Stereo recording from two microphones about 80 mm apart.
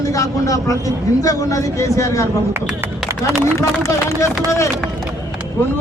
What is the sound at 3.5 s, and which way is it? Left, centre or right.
Speech, left.